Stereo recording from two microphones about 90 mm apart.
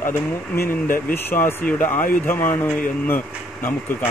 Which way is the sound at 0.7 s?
25° left (ahead or behind).